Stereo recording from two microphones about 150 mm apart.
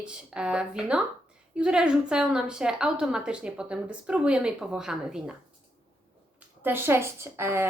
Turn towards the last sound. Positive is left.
turn(degrees=-15)  # may be behind; listen again after turning